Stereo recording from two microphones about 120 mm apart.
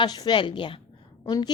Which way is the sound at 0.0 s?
35° left (ahead or behind).